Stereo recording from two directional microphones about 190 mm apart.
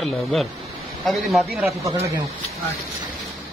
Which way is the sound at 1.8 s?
15° right (ahead or behind).